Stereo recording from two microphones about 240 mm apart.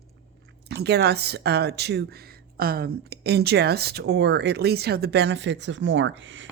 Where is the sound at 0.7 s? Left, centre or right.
Right.